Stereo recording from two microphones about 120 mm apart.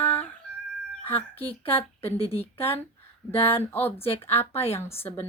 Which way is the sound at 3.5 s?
15° left (ahead or behind).